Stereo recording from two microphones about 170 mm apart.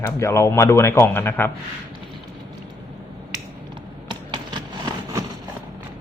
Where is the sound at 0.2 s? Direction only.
15° left (ahead or behind).